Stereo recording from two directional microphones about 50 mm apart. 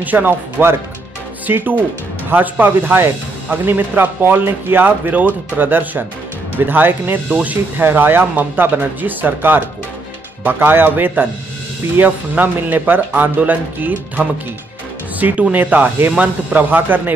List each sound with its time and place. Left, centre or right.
0.0 s speech: right
7.2 s speech: right
7.7 s speech: right